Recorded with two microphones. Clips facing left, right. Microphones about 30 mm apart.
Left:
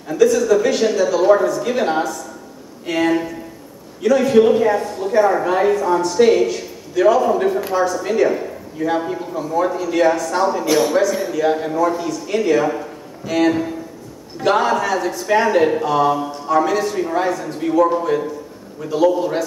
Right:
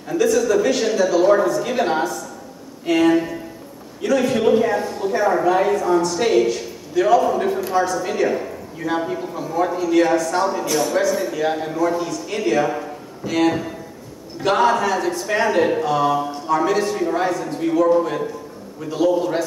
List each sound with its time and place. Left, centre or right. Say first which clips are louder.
0.1 s a man's voice: left 3 dB; centre
10.7 s a man's voice: left 4 dB; left
11.0 s a man's voice: left 2 dB; centre